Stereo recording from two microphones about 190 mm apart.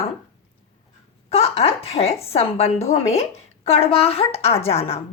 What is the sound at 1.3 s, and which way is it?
A woman's voice, 30° left (ahead or behind).